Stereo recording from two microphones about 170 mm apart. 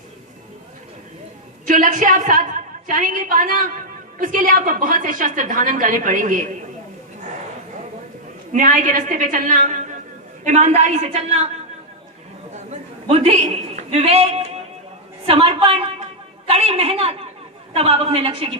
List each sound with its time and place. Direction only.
1.6 s a woman's voice: 50° right (ahead or behind)
8.5 s a woman's voice: 50° right (ahead or behind)
12.5 s a sound: 40° right (ahead or behind)
16.5 s a woman's voice: 35° right (ahead or behind)